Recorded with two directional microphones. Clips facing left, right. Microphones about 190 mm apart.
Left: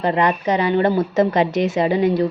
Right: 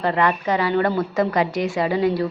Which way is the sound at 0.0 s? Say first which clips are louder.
Left 2 dB; 20° left (ahead or behind).